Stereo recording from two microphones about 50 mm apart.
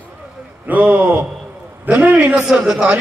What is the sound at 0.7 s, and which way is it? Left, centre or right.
A man's voice, right.